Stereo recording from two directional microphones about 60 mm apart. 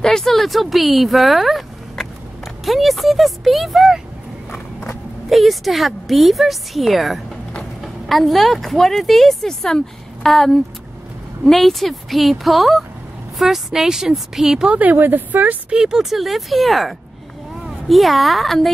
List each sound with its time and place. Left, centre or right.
0.0 s speech: centre
5.3 s a woman's voice: centre
14.7 s a woman's voice: right
15.7 s a woman's voice: centre